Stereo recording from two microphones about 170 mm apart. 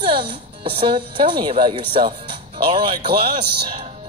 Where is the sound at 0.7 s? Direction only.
30° right (ahead or behind).